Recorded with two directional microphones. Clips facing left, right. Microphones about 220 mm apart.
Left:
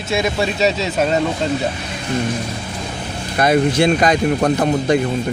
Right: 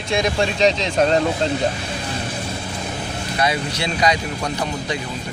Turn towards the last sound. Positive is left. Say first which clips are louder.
# left 9 dB
turn(degrees=50)  # may be behind; listen again after turning